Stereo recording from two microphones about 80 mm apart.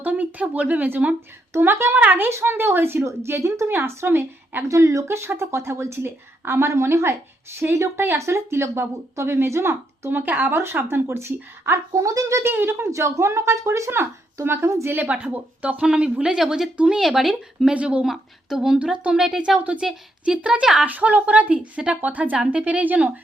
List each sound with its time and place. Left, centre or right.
0.0 s speech: right
4.7 s a woman's voice: right
11.9 s a woman's voice: right
15.1 s speech: centre